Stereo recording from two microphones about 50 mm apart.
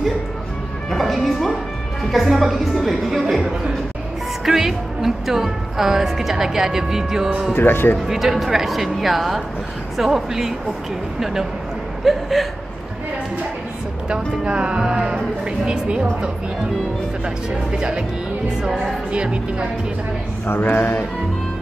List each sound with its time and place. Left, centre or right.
0.8 s a woman's voice: centre
7.5 s speech: left
8.1 s a woman's voice: centre
12.0 s a woman's voice: centre
14.4 s speech: centre
17.6 s a woman's voice: centre
19.1 s speech: centre
20.4 s speech: left